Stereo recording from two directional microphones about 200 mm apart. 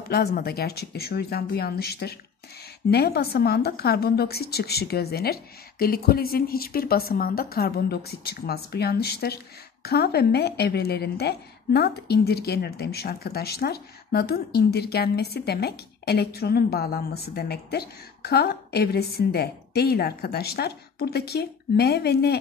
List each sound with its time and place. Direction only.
0.1 s a woman's voice: 50° left (ahead or behind)